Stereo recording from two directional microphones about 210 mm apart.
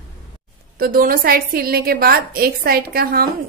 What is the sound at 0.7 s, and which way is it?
A woman's voice, 45° right (ahead or behind).